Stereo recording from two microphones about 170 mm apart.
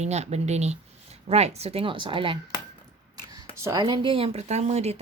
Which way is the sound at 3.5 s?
20° right (ahead or behind).